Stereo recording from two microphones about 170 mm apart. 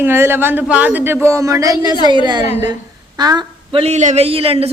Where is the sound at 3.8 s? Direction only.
45° right (ahead or behind).